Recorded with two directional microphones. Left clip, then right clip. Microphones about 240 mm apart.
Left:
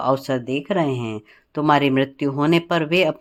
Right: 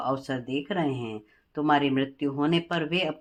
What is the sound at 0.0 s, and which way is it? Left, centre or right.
Speech, left.